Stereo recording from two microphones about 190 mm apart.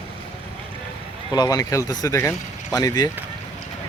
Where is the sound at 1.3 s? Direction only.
20° left (ahead or behind).